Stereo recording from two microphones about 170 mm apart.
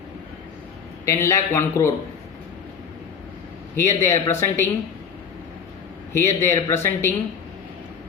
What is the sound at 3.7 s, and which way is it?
Speech, 15° left (ahead or behind).